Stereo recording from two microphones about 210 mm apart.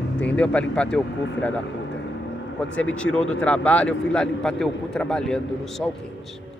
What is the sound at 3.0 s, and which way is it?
Speech, 5° left (ahead or behind).